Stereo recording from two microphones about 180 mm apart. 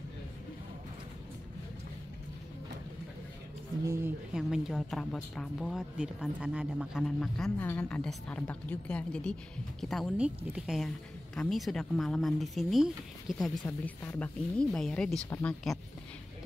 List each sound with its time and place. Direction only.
3.8 s speech: 15° right (ahead or behind)
4.3 s a woman's voice: centre (ahead or behind)
13.7 s a woman's voice: 10° left (ahead or behind)